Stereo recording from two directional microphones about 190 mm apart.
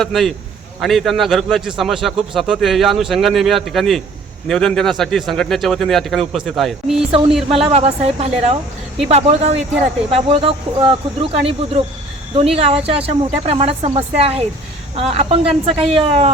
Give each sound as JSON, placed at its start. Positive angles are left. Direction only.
{"t": 0.0, "sound": "speech", "side_deg": 0}
{"t": 7.6, "sound": "speech", "side_deg": -35}